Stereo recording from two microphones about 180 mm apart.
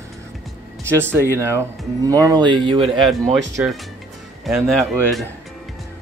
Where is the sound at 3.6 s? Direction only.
10° right (ahead or behind).